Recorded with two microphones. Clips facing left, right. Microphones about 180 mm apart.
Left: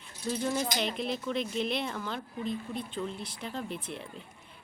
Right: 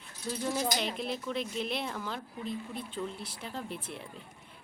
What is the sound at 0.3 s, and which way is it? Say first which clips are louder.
A woman's voice: left 1 dB; centre (ahead or behind).